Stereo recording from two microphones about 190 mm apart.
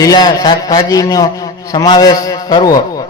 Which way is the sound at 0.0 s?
20° left (ahead or behind).